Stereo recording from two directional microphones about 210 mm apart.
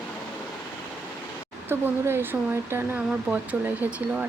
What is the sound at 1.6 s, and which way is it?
Speech, 10° right (ahead or behind).